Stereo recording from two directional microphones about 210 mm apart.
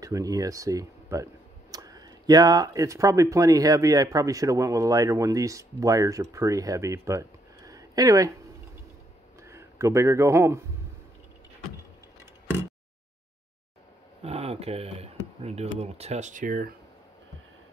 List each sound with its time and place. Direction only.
0.0 s speech: 15° right (ahead or behind)
9.4 s speech: 15° right (ahead or behind)
14.2 s a sound: 30° right (ahead or behind)
15.4 s speech: 30° right (ahead or behind)